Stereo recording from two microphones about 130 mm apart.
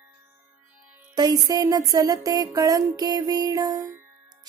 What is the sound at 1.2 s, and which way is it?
Speech, 30° right (ahead or behind).